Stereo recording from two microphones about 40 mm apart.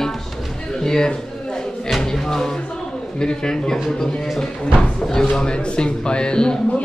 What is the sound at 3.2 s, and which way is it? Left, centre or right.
Speech, centre.